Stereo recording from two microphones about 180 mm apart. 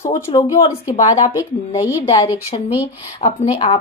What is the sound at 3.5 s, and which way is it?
Speech, 25° left (ahead or behind).